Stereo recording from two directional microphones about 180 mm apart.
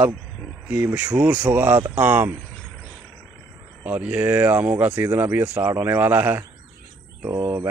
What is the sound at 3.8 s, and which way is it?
Speech, 10° right (ahead or behind).